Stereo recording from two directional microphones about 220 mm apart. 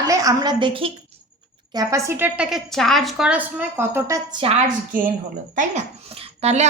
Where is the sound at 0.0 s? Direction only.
15° right (ahead or behind).